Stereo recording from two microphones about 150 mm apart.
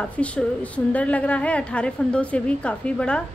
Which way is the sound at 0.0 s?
10° left (ahead or behind).